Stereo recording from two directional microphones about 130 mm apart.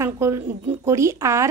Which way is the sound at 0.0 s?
20° right (ahead or behind).